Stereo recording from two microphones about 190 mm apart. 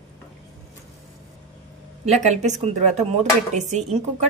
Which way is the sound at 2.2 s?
40° right (ahead or behind).